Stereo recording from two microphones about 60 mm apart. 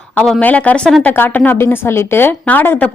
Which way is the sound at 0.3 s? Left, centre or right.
Left.